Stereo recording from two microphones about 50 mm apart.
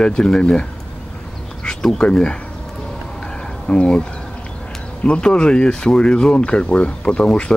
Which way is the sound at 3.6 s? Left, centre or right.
Centre.